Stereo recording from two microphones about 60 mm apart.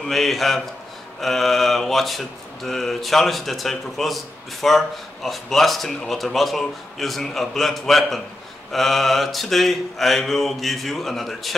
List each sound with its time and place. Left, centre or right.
0.0 s speech: centre